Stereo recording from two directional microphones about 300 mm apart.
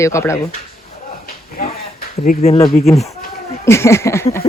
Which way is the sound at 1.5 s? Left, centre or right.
Left.